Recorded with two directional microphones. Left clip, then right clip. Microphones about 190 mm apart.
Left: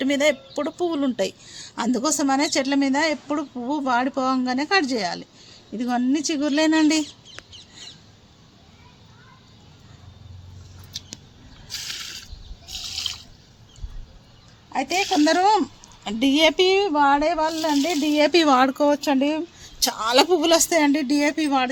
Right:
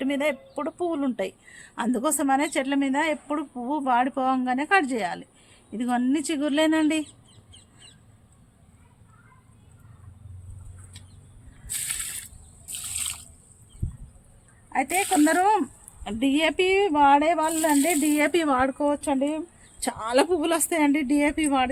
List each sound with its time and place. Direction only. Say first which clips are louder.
0.0 s speech: left 5 dB; 30° left (ahead or behind)
14.7 s a woman's voice: left 2 dB; 25° left (ahead or behind)
16.7 s speech: even; 10° left (ahead or behind)
18.3 s speech: left 6 dB; 45° left (ahead or behind); by 21.7 s 10° left (ahead or behind)